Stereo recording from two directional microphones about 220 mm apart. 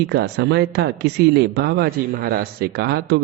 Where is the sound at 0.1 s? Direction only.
50° right (ahead or behind).